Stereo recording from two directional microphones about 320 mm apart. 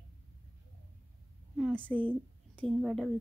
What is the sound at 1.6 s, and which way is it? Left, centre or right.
A woman's voice, centre.